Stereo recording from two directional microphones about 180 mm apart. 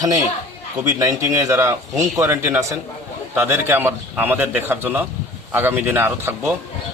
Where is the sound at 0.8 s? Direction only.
15° right (ahead or behind).